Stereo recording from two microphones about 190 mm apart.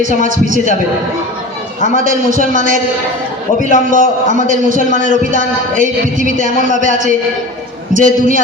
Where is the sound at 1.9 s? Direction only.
45° right (ahead or behind).